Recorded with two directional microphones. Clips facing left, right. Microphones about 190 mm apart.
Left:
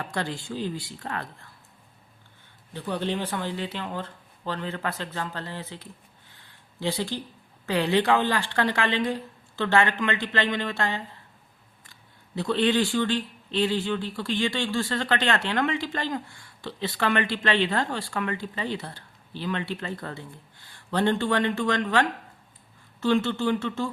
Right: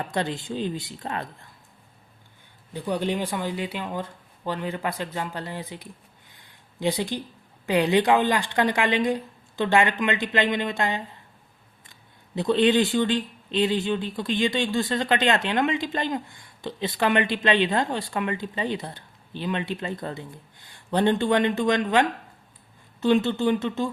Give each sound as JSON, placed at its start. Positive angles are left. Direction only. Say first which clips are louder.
{"t": 0.0, "sound": "speech", "louder": "right 3 dB", "side_deg": -20}
{"t": 2.7, "sound": "speech", "louder": "right 3 dB", "side_deg": -15}
{"t": 6.3, "sound": "a sound", "louder": "right 2 dB", "side_deg": -15}
{"t": 7.7, "sound": "speech", "louder": "right 3 dB", "side_deg": -15}